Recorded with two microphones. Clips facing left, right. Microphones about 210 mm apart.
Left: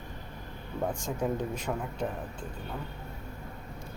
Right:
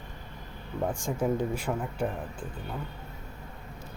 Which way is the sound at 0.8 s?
5° right (ahead or behind).